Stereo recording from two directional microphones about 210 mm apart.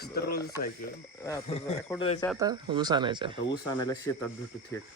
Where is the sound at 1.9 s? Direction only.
15° left (ahead or behind).